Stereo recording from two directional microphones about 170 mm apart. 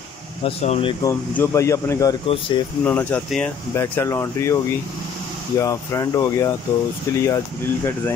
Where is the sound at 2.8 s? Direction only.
10° left (ahead or behind).